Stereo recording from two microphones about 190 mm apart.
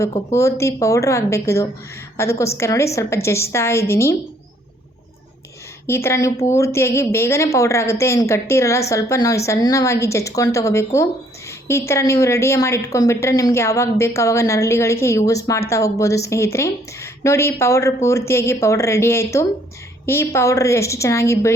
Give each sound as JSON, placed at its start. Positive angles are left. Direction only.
{"t": 0.0, "sound": "a woman's voice", "side_deg": 15}
{"t": 5.8, "sound": "a woman's voice", "side_deg": 15}